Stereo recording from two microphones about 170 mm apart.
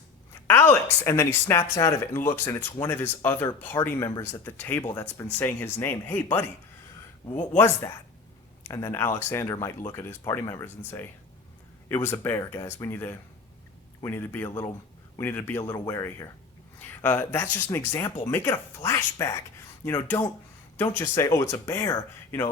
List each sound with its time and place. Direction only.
0.4 s a woman's voice: 10° left (ahead or behind)
7.5 s speech: 15° left (ahead or behind)